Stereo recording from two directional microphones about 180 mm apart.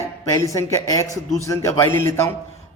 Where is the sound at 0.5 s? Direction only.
15° left (ahead or behind).